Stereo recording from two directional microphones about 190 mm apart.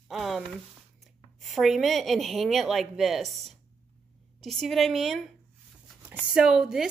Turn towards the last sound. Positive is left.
turn(degrees=-5)  # may be behind; listen again after turning